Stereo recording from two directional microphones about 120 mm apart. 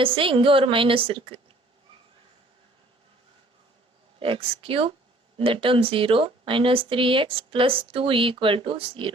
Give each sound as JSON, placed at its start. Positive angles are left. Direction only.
{"t": 0.0, "sound": "speech", "side_deg": -45}
{"t": 4.2, "sound": "speech", "side_deg": -50}